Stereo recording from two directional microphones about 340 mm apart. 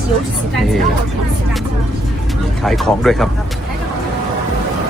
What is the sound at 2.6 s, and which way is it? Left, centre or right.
Speech, centre.